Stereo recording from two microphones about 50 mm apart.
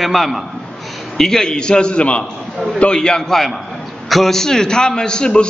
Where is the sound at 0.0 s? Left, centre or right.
Centre.